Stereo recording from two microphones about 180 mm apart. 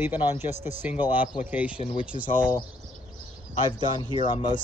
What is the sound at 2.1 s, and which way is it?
Speech, 40° left (ahead or behind).